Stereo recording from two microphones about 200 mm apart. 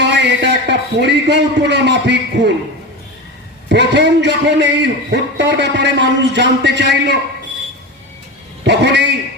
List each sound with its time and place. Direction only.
0.0 s a man's voice: 60° right (ahead or behind)
3.7 s a man's voice: 60° right (ahead or behind)
8.6 s a man's voice: 60° right (ahead or behind)